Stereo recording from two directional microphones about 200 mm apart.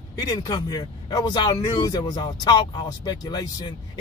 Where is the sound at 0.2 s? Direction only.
15° left (ahead or behind).